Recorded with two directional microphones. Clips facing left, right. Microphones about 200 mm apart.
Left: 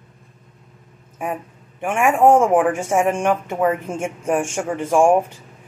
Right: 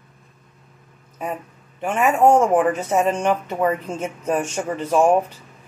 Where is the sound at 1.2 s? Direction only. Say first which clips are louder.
Left 2 dB; 15° left (ahead or behind).